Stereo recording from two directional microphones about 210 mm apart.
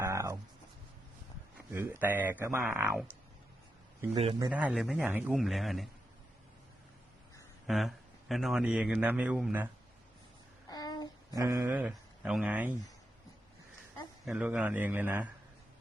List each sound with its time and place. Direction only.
0.0 s writing: 15° right (ahead or behind)
1.5 s speech: 10° right (ahead or behind)
4.1 s a man's voice: 25° right (ahead or behind)
4.5 s a man's voice: 5° right (ahead or behind)
7.7 s a man's voice: centre (ahead or behind)
10.7 s child singing: 20° left (ahead or behind)
11.3 s speech: 15° right (ahead or behind)
14.3 s speech: 5° right (ahead or behind)